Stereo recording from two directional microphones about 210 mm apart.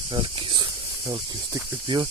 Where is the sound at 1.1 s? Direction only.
20° right (ahead or behind).